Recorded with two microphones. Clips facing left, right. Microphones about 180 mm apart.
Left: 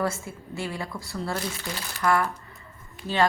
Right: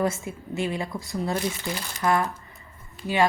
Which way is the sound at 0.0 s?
15° right (ahead or behind).